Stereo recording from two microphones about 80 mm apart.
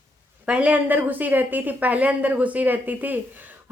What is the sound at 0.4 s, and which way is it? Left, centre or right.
A woman's voice, centre.